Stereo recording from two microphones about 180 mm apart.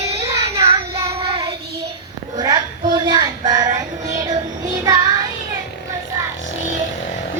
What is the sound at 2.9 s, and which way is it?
Child singing, 25° right (ahead or behind).